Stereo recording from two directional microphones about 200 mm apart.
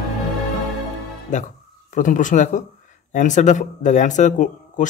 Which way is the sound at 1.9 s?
40° left (ahead or behind).